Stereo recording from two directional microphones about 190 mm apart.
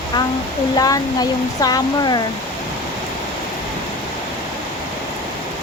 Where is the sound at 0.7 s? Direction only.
20° left (ahead or behind).